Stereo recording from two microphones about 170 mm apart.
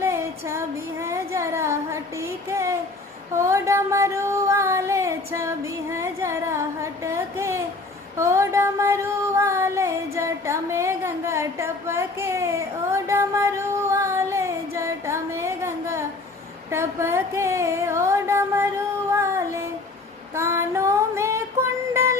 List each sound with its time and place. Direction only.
0.0 s female singing: 15° right (ahead or behind)
3.3 s a sound: 15° right (ahead or behind)
8.2 s music: 15° right (ahead or behind)
20.3 s child singing: 15° right (ahead or behind)